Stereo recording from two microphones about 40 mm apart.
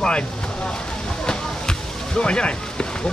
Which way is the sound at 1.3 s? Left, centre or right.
Centre.